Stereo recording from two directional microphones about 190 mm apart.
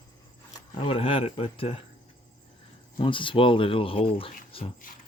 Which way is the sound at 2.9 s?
25° left (ahead or behind).